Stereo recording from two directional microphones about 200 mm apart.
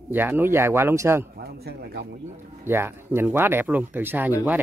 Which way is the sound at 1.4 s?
55° right (ahead or behind).